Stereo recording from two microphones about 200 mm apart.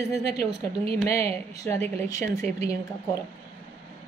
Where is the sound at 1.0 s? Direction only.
15° left (ahead or behind).